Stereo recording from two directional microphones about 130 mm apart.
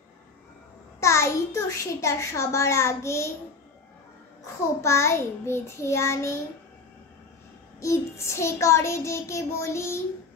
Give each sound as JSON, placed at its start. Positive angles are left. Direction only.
{"t": 1.0, "sound": "a child's voice", "side_deg": 20}
{"t": 4.8, "sound": "a child's voice", "side_deg": 20}
{"t": 7.8, "sound": "a child's voice", "side_deg": 20}